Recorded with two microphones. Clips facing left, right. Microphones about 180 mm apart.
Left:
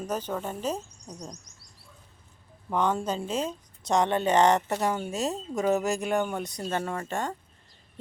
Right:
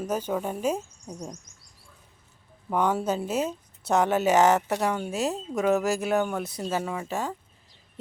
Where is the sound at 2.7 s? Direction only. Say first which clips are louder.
Right 2 dB; 10° right (ahead or behind).